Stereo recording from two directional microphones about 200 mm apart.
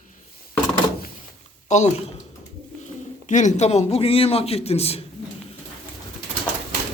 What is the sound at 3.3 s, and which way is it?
A man's voice, 35° left (ahead or behind).